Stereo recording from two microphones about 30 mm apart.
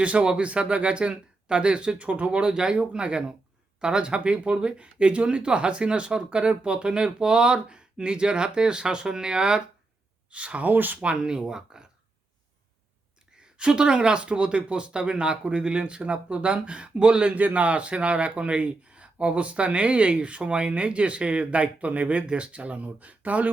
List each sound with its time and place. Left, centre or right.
0.0 s speech: right
2.5 s speech: right
10.3 s speech: right
10.7 s speech: right
11.0 s speech: right
11.4 s speech: right
13.4 s speech: right
17.3 s speech: right